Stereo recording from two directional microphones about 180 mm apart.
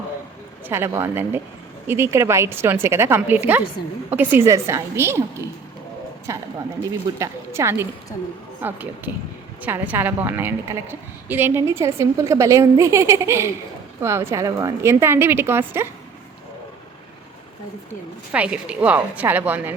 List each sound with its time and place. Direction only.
0.7 s a woman's voice: 15° right (ahead or behind)
6.3 s a woman's voice: 15° right (ahead or behind)
18.3 s a woman's voice: 5° right (ahead or behind)